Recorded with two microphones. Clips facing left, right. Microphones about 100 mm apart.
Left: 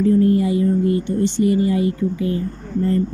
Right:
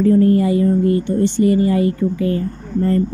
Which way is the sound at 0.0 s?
55° right (ahead or behind).